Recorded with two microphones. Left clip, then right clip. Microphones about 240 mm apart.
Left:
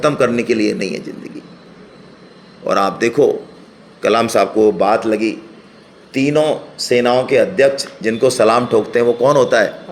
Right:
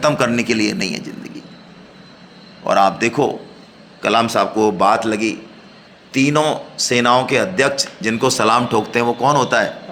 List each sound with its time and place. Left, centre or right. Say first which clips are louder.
0.0 s a man's voice: left 2 dB; right
2.6 s a man's voice: right 1 dB; centre